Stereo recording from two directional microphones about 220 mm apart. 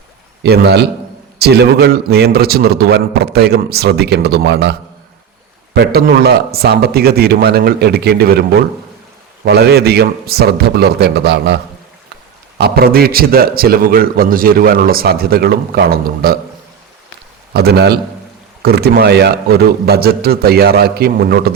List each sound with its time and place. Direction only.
0.4 s a man's voice: 50° right (ahead or behind)
17.5 s a man's voice: 45° right (ahead or behind)